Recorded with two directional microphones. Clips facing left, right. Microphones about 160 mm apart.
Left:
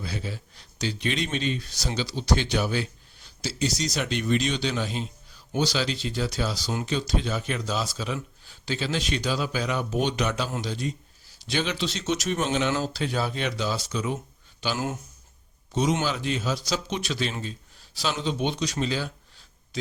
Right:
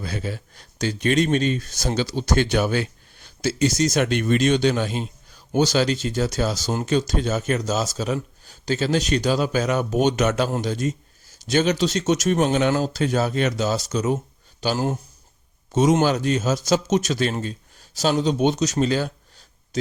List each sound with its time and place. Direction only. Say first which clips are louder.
0.0 s speech: right 4 dB; 55° right (ahead or behind)